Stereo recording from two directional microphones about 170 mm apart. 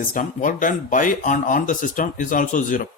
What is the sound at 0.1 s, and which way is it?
Speech, 50° left (ahead or behind).